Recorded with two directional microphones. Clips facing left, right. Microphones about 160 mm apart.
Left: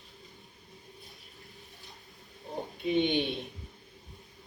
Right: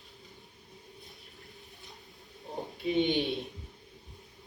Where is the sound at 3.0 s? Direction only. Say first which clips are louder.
Even; centre (ahead or behind).